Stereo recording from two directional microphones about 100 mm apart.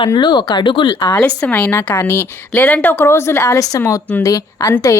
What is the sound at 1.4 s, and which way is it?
A woman's voice, 15° left (ahead or behind).